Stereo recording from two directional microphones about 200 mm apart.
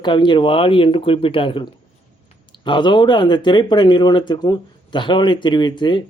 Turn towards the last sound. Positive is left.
turn(degrees=25)  # may be behind; listen again after turning